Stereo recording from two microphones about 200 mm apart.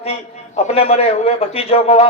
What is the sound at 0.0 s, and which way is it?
A man's voice, 30° left (ahead or behind).